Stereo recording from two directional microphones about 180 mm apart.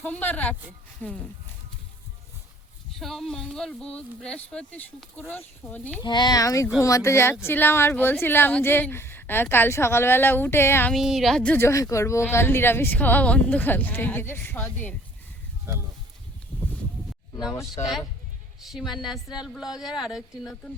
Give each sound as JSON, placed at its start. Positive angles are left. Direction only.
{"t": 0.0, "sound": "speech", "side_deg": 10}
{"t": 3.0, "sound": "speech", "side_deg": 0}
{"t": 6.0, "sound": "speech", "side_deg": 25}
{"t": 10.9, "sound": "speech", "side_deg": 0}
{"t": 18.6, "sound": "speech", "side_deg": 0}